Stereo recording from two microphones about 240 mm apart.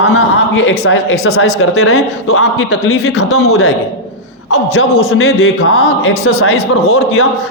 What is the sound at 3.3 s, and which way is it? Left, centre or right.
A man's voice, left.